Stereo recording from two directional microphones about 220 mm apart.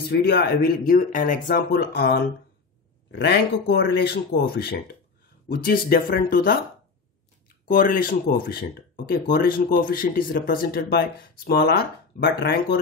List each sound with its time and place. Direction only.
0.1 s speech: 45° left (ahead or behind)